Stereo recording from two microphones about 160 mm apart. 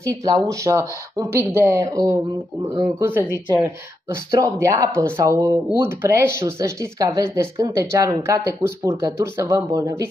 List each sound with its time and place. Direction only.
0.0 s speech: 20° right (ahead or behind)
4.3 s speech: 20° right (ahead or behind)